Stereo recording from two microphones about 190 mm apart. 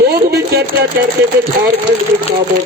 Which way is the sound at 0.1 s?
60° right (ahead or behind).